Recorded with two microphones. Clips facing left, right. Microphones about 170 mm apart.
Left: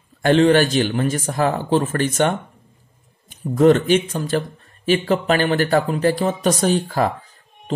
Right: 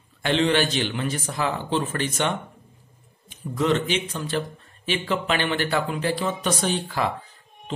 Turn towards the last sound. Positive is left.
turn(degrees=45)  # may be behind; listen again after turning